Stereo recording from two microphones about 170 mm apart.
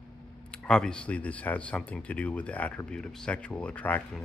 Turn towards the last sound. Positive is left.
turn(degrees=10)  # may be behind; listen again after turning